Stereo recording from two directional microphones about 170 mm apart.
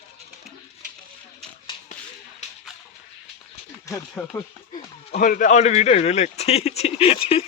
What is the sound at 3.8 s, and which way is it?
Speech, 15° left (ahead or behind).